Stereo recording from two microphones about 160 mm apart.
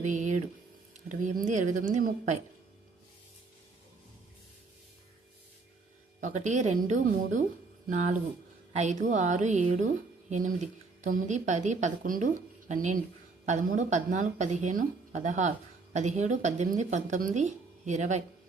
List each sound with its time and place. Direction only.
0.0 s a sound: 50° right (ahead or behind)
1.0 s speech: 50° right (ahead or behind)
6.1 s speech: 50° right (ahead or behind)